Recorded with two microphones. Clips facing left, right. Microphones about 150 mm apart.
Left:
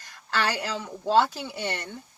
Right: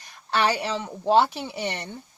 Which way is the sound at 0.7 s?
20° right (ahead or behind).